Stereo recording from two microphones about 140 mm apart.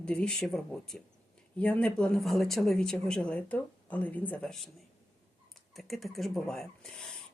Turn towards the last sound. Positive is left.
turn(degrees=5)  # may be behind; listen again after turning